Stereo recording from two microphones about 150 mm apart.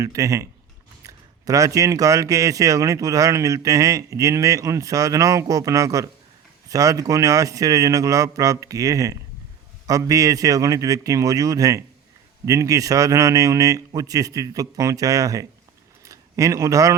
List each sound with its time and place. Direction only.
0.0 s speech: 20° right (ahead or behind)